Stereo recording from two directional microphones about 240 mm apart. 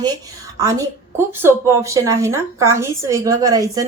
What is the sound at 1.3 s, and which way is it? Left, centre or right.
A woman's voice, centre.